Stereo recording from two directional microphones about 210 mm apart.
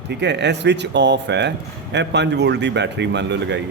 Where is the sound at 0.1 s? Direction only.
55° right (ahead or behind).